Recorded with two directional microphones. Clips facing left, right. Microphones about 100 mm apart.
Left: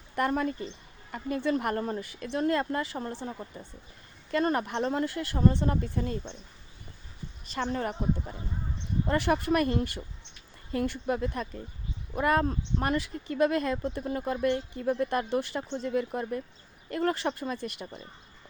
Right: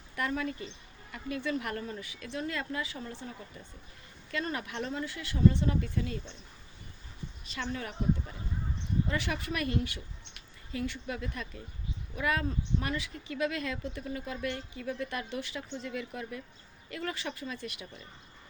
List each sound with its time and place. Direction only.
0.2 s speech: 45° left (ahead or behind)
4.3 s speech: 45° left (ahead or behind)
4.9 s speech: 50° left (ahead or behind)
7.5 s speech: 40° left (ahead or behind)